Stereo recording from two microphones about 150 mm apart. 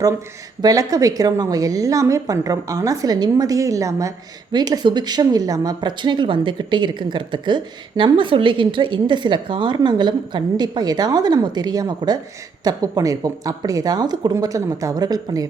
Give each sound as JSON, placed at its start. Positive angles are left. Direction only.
{"t": 0.6, "sound": "a woman's voice", "side_deg": -25}